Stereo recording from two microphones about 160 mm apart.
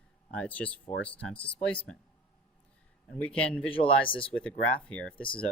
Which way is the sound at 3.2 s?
5° left (ahead or behind).